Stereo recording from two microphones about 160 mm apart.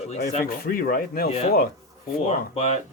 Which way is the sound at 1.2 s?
40° left (ahead or behind).